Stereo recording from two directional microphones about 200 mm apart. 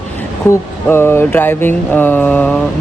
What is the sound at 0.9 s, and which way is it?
Speech, 10° left (ahead or behind).